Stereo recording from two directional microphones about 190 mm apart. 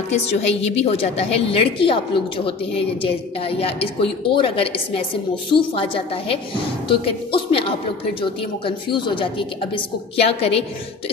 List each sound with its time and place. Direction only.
0.1 s a woman's voice: 35° left (ahead or behind)